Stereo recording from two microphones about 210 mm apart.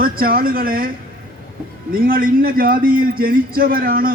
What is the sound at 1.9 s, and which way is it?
A man's voice, 45° right (ahead or behind).